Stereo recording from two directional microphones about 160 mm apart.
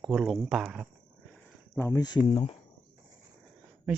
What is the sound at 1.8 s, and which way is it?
Speech, 15° left (ahead or behind).